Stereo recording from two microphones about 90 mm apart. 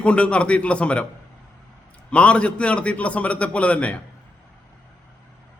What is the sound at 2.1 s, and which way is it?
A man's voice, 15° left (ahead or behind).